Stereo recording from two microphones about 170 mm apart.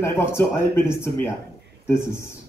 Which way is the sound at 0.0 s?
15° left (ahead or behind).